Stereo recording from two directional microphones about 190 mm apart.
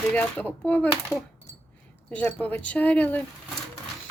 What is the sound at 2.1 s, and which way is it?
Speech, 10° left (ahead or behind).